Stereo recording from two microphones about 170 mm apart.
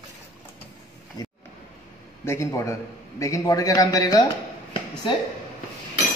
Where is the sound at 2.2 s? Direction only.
15° left (ahead or behind).